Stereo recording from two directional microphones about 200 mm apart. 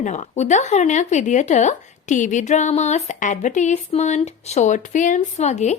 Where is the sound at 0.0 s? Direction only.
35° left (ahead or behind).